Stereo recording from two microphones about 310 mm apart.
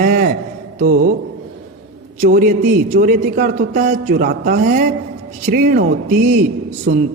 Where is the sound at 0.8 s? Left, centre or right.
Right.